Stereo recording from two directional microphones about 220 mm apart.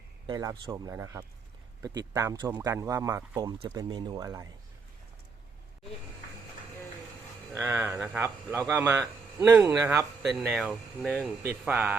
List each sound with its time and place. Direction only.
0.3 s speech: 20° right (ahead or behind)
7.5 s speech: 10° right (ahead or behind)
8.7 s speech: 10° right (ahead or behind)